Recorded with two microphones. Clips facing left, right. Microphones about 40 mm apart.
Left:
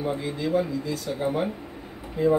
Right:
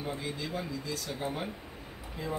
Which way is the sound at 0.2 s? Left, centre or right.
Centre.